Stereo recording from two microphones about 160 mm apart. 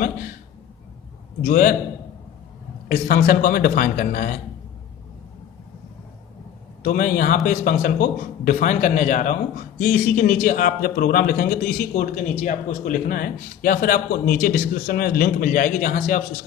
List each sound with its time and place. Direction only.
1.4 s a man's voice: 60° left (ahead or behind)
2.9 s a man's voice: 60° left (ahead or behind)
6.8 s a man's voice: 60° left (ahead or behind)